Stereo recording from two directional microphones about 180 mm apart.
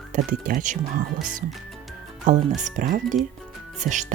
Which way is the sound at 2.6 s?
45° right (ahead or behind).